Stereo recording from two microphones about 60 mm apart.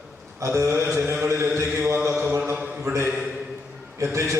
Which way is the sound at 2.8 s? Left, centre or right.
Right.